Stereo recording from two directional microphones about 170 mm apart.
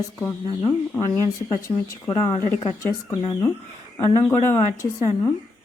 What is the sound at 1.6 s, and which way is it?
A woman's voice, 20° left (ahead or behind).